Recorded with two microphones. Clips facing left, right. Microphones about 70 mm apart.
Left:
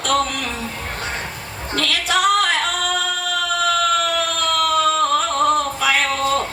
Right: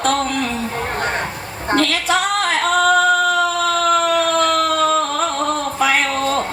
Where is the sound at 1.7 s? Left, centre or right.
Right.